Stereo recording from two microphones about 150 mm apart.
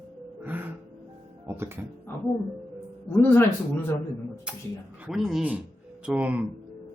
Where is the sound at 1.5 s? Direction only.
15° right (ahead or behind).